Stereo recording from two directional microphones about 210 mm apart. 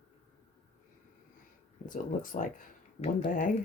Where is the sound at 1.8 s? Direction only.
40° left (ahead or behind).